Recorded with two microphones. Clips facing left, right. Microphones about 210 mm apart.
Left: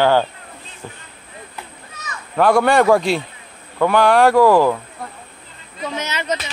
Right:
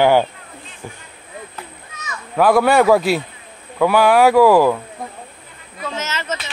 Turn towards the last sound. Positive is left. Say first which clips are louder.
# left 2 dB
turn(degrees=15)  # may be behind; listen again after turning